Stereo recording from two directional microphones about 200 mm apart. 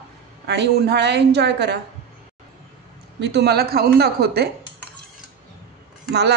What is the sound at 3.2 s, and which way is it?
A woman's voice, 55° right (ahead or behind).